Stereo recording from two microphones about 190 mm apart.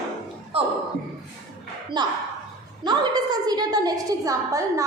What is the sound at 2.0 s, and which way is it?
A woman's voice, 25° right (ahead or behind).